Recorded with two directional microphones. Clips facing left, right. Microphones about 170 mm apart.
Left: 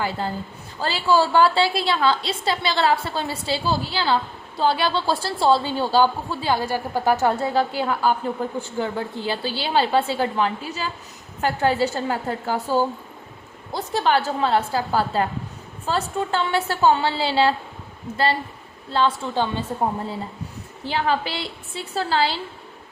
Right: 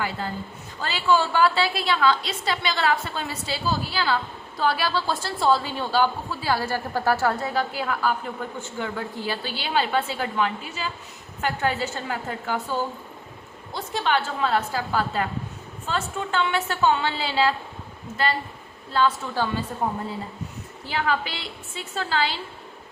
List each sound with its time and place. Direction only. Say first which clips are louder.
0.2 s a woman's voice: left 3 dB; 30° left (ahead or behind)
18.9 s a woman's voice: left 2 dB; 30° left (ahead or behind)
20.8 s a woman's voice: left 3 dB; 30° left (ahead or behind)